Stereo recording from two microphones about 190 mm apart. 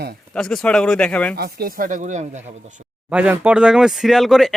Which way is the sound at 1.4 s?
55° right (ahead or behind).